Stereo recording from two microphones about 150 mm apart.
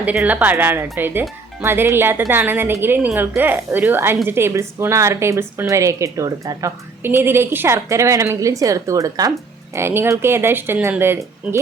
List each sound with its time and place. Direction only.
0.0 s a woman's voice: 10° right (ahead or behind)